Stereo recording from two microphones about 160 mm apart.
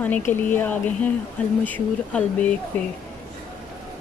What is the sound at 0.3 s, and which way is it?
Speech, 10° left (ahead or behind).